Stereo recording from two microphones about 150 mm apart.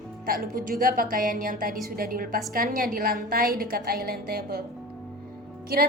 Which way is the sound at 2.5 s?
75° right (ahead or behind).